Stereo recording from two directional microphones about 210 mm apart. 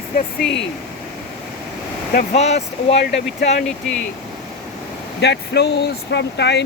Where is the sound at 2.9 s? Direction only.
55° left (ahead or behind).